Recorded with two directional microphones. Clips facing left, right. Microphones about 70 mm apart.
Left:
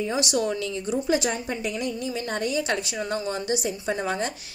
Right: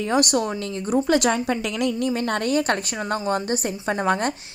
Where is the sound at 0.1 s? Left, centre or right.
Right.